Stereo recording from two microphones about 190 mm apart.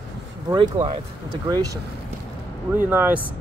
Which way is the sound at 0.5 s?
25° right (ahead or behind).